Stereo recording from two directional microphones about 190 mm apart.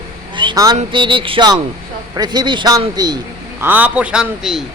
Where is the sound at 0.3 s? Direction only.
20° right (ahead or behind).